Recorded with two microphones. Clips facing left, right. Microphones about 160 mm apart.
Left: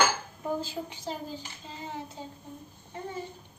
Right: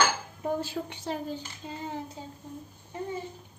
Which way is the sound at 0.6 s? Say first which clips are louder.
Right 2 dB; 60° right (ahead or behind).